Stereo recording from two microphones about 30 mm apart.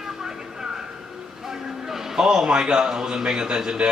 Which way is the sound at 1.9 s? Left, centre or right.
Centre.